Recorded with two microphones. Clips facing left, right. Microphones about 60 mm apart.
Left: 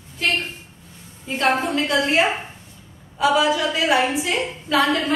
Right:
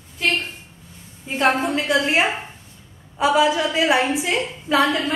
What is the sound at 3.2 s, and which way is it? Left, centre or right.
Speech, right.